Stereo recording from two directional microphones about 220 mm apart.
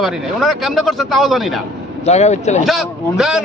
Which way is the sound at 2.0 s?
30° left (ahead or behind).